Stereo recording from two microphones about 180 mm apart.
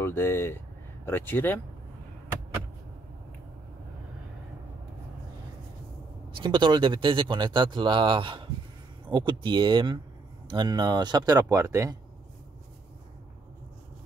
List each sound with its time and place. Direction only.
0.0 s speech: 15° left (ahead or behind)
6.3 s speech: 25° right (ahead or behind)